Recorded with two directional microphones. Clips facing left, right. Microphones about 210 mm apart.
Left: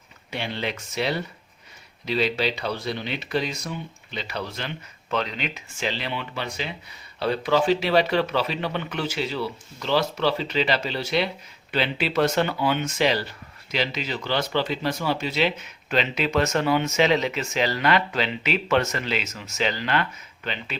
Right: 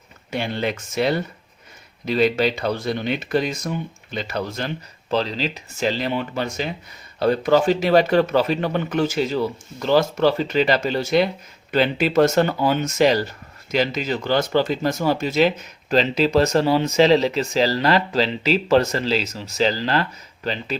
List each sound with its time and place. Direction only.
0.3 s speech: 45° right (ahead or behind)
5.1 s speech: 35° right (ahead or behind)